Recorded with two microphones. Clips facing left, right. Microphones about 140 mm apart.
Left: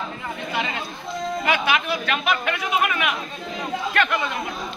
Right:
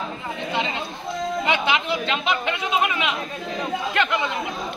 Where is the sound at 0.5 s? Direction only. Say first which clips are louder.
Right 1 dB; 25° right (ahead or behind).